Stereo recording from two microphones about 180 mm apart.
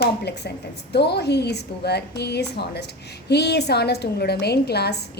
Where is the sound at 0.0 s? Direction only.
65° left (ahead or behind).